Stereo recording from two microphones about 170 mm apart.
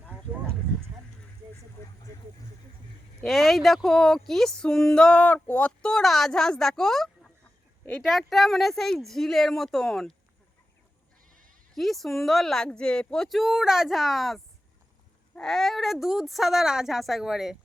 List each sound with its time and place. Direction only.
3.2 s speech: centre (ahead or behind)
11.3 s sheep: 50° right (ahead or behind)
11.7 s speech: centre (ahead or behind)